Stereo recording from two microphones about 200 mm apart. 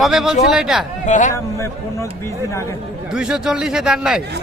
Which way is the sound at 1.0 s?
40° left (ahead or behind).